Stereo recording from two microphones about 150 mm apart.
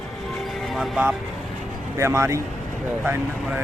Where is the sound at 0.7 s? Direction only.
5° right (ahead or behind).